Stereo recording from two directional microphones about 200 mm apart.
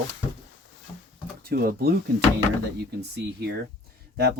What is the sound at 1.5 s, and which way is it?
Speech, 50° right (ahead or behind).